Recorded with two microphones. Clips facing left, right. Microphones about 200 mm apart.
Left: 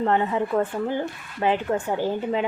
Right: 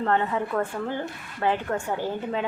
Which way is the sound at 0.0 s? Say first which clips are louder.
Left 2 dB; 15° left (ahead or behind).